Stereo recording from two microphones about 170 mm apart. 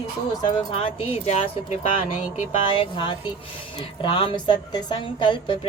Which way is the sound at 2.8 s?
25° left (ahead or behind).